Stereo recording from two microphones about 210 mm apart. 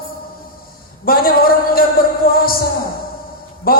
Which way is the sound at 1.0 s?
45° left (ahead or behind).